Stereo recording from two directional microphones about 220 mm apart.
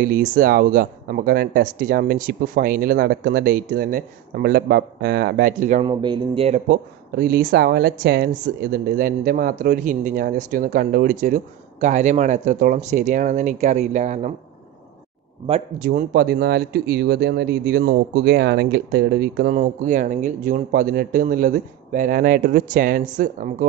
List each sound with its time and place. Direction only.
0.0 s speech: 40° right (ahead or behind)
5.9 s speech: 20° right (ahead or behind)
6.7 s speech: 45° right (ahead or behind)
15.4 s speech: 30° right (ahead or behind)